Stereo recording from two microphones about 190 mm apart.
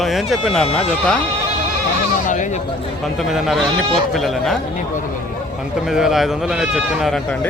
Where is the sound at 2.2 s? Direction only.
40° left (ahead or behind).